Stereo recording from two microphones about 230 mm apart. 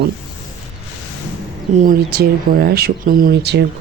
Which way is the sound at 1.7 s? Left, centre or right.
Right.